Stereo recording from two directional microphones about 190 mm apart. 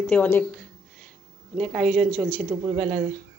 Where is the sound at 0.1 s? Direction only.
10° left (ahead or behind).